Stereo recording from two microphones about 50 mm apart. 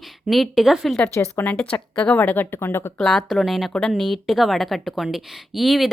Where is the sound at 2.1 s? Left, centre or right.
Left.